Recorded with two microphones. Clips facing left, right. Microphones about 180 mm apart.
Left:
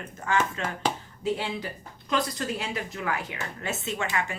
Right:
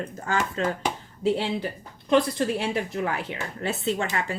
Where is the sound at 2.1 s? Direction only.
30° right (ahead or behind).